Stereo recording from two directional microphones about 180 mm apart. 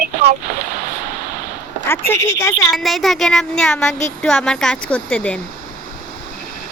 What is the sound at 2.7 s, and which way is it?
Speech, centre (ahead or behind).